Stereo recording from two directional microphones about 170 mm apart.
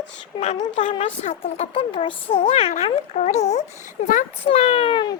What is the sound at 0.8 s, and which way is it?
A child's voice, 45° left (ahead or behind).